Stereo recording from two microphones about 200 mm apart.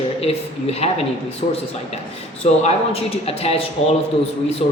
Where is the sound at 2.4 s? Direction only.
30° left (ahead or behind).